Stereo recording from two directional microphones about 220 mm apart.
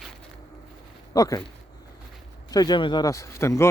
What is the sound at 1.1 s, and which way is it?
Speech, 15° left (ahead or behind).